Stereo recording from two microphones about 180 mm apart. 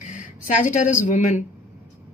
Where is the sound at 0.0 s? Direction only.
45° left (ahead or behind).